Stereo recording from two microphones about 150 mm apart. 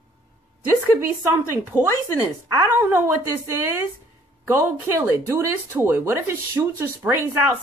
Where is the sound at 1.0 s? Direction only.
15° right (ahead or behind).